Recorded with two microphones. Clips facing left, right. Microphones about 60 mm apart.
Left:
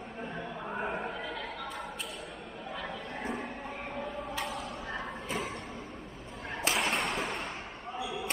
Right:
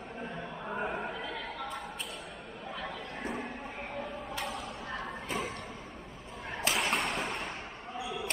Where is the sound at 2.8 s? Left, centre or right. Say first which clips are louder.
Left 1 dB; centre.